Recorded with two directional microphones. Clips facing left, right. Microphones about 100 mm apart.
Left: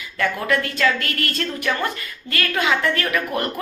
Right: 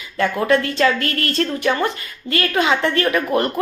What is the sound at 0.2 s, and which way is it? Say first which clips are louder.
A woman's voice: right 4 dB; 30° right (ahead or behind).